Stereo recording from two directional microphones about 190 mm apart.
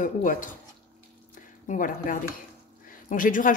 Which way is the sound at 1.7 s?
45° left (ahead or behind).